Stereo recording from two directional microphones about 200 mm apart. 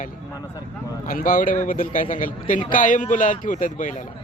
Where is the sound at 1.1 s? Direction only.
45° left (ahead or behind).